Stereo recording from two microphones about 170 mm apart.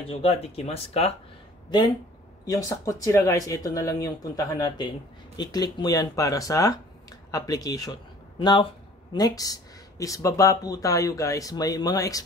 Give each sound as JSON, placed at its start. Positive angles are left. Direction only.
{"t": 0.1, "sound": "speech", "side_deg": 35}
{"t": 2.4, "sound": "speech", "side_deg": 20}